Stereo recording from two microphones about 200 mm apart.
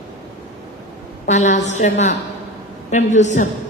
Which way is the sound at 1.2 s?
35° left (ahead or behind).